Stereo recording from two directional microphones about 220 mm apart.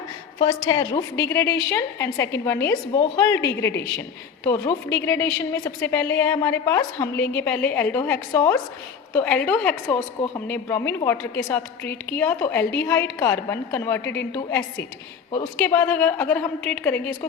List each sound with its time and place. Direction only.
0.4 s a woman's voice: 15° left (ahead or behind)